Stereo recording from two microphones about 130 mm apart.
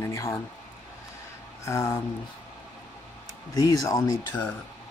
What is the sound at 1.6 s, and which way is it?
Speech, 25° left (ahead or behind).